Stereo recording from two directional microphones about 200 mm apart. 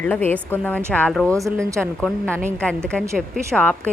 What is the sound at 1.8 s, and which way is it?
A woman's voice, 5° left (ahead or behind).